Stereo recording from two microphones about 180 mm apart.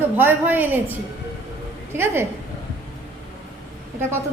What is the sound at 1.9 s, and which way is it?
Speech, 15° right (ahead or behind).